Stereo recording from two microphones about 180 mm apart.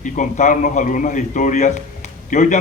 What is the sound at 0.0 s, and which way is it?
A man's voice, 45° left (ahead or behind).